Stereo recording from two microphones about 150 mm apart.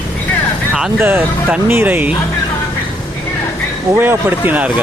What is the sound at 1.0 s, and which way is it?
Speech, 15° right (ahead or behind).